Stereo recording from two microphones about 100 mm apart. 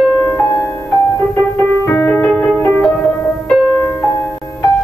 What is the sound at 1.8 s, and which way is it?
Music, 25° left (ahead or behind).